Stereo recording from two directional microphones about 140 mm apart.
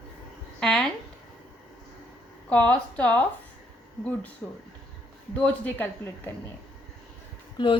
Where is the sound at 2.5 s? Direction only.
10° left (ahead or behind).